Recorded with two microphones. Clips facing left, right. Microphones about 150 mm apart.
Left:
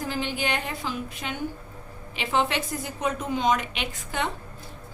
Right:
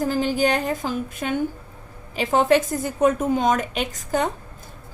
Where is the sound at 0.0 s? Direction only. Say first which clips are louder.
Right 8 dB; 40° right (ahead or behind).